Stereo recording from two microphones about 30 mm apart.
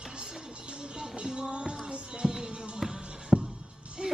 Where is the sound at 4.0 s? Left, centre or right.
Right.